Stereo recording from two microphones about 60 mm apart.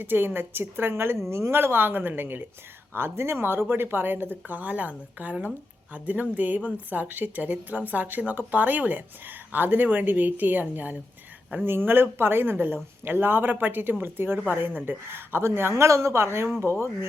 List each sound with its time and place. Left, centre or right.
0.0 s a woman's voice: right
16.6 s speech: left